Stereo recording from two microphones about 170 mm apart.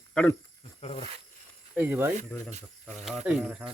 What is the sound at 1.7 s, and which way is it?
Speech, 10° right (ahead or behind).